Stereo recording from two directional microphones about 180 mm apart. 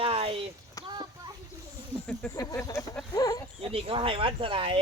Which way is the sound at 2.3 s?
15° left (ahead or behind).